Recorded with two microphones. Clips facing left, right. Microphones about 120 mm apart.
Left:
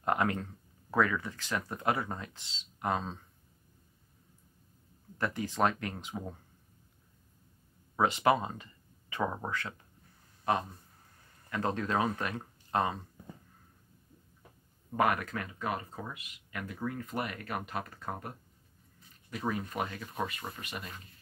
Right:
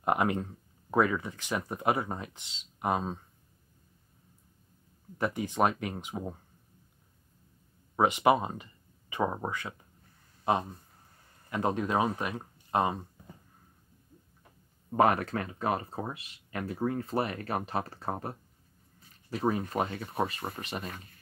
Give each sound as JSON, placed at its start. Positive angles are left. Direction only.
{"t": 0.0, "sound": "speech", "side_deg": -20}
{"t": 5.1, "sound": "speech", "side_deg": -15}
{"t": 7.9, "sound": "speech", "side_deg": -15}
{"t": 15.0, "sound": "speech", "side_deg": -30}
{"t": 19.3, "sound": "speech", "side_deg": -35}